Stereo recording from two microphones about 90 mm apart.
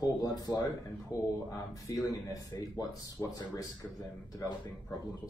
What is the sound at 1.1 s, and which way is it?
Speech, 50° left (ahead or behind).